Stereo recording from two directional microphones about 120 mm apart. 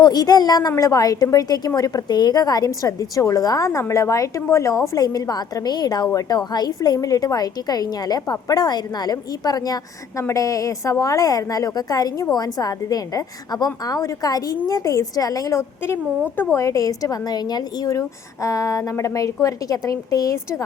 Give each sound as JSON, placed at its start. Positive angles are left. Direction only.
{"t": 0.0, "sound": "a woman's voice", "side_deg": 35}